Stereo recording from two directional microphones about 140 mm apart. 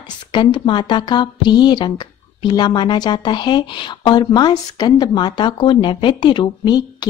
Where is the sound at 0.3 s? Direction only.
35° left (ahead or behind).